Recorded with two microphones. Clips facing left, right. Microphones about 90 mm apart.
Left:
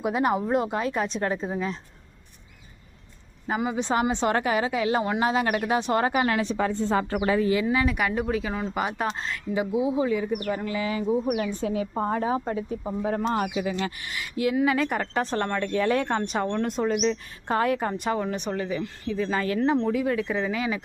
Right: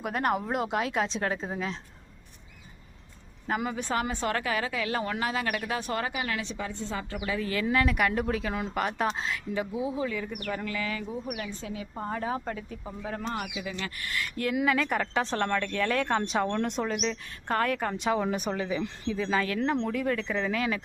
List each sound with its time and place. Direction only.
0.0 s speech: 5° left (ahead or behind)
3.4 s a woman's voice: 5° left (ahead or behind)
3.8 s a woman's voice: 20° left (ahead or behind)
6.1 s a woman's voice: 45° left (ahead or behind)
7.4 s speech: 15° left (ahead or behind); by 9.4 s centre (ahead or behind)
9.6 s speech: 15° left (ahead or behind)
11.3 s speech: 40° left (ahead or behind)
12.2 s speech: 20° left (ahead or behind)
14.0 s speech: 15° left (ahead or behind)
16.0 s speech: centre (ahead or behind)